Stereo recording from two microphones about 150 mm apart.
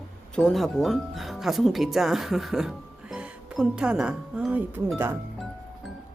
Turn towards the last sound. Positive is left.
turn(degrees=-5)  # may be behind; listen again after turning